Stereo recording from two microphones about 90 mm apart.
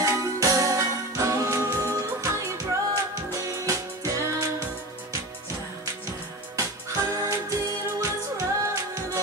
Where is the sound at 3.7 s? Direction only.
40° right (ahead or behind).